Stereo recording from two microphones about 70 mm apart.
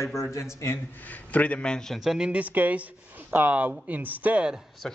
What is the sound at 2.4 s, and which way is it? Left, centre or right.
Speech, right.